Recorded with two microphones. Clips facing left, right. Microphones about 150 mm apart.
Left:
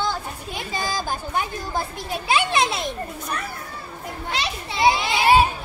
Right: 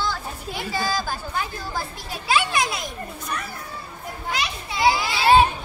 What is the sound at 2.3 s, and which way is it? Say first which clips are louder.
Speech: left 1 dB; 25° left (ahead or behind).